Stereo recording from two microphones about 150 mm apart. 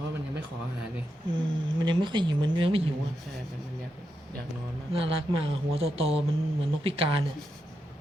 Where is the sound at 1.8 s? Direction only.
30° right (ahead or behind).